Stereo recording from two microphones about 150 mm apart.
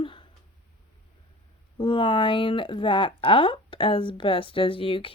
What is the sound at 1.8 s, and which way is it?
Speech, 35° left (ahead or behind).